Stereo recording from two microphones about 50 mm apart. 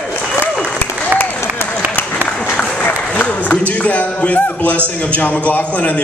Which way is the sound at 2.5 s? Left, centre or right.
Left.